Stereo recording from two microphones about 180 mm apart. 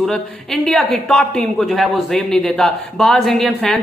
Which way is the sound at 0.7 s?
5° left (ahead or behind).